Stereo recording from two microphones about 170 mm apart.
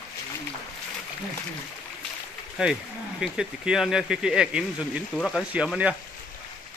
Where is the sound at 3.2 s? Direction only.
5° right (ahead or behind).